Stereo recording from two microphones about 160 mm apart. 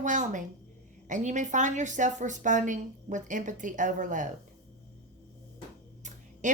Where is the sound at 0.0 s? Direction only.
50° right (ahead or behind).